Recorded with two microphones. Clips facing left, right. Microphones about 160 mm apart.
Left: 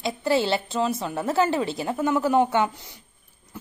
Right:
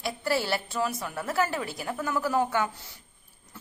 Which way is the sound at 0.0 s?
20° left (ahead or behind).